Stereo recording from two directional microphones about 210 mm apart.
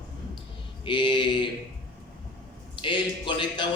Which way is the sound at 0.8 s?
20° left (ahead or behind).